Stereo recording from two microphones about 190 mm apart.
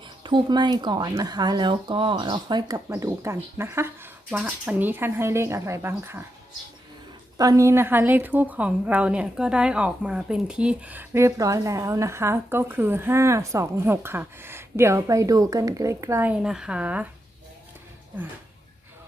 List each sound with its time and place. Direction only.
0.2 s a woman's voice: 25° right (ahead or behind)
7.3 s a woman's voice: 15° right (ahead or behind)